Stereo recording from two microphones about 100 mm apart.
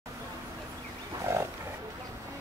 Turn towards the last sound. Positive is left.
turn(degrees=-25)  # may be behind; listen again after turning